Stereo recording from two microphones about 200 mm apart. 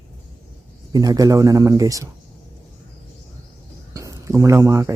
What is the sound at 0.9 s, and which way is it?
Speech, 20° right (ahead or behind).